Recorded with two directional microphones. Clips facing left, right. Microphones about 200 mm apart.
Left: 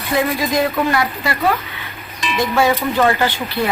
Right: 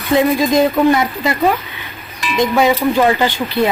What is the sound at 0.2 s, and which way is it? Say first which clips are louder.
Speech: right 4 dB; 20° right (ahead or behind).